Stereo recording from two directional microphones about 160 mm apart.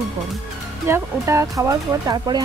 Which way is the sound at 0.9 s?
20° right (ahead or behind).